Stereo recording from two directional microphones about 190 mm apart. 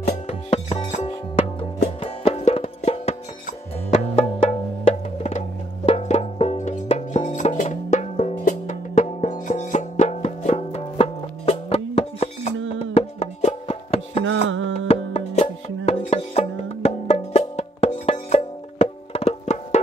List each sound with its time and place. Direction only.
0.3 s music: 35° left (ahead or behind)
5.9 s music: 35° left (ahead or behind)
12.5 s a sound: 90° right
12.9 s music: 35° left (ahead or behind)